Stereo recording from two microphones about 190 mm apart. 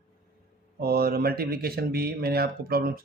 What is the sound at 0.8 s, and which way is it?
Speech, 55° right (ahead or behind).